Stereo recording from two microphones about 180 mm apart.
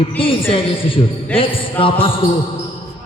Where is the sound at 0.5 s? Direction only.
30° left (ahead or behind).